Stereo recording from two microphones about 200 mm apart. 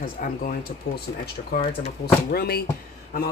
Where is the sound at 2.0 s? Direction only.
50° left (ahead or behind).